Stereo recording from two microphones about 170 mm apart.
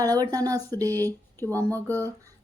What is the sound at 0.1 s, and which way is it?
Speech, 20° right (ahead or behind).